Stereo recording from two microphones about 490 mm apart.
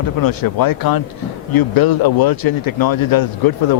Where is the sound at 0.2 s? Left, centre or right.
Left.